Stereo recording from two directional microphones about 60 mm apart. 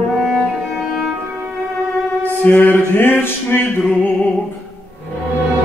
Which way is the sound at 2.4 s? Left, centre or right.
Left.